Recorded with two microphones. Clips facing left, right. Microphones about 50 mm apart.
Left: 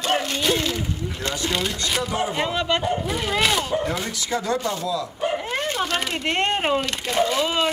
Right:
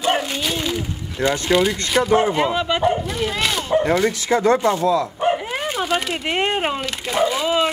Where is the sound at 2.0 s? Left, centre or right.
Right.